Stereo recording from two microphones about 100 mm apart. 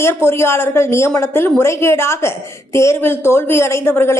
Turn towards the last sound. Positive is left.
turn(degrees=25)  # may be behind; listen again after turning